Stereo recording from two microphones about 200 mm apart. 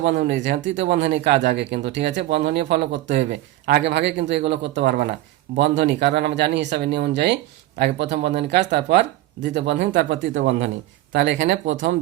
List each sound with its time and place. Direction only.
0.0 s speech: 60° right (ahead or behind)
1.1 s speech: 55° right (ahead or behind)
10.3 s speech: 70° right (ahead or behind)